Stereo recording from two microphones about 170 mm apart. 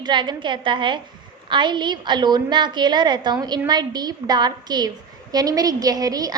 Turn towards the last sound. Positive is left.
turn(degrees=-20)  # may be behind; listen again after turning